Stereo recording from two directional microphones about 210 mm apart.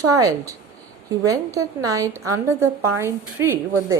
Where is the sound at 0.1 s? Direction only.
15° right (ahead or behind).